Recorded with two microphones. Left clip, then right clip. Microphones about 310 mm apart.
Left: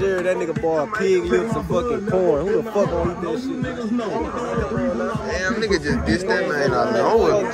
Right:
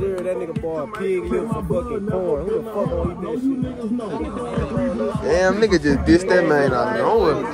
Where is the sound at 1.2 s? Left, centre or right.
Left.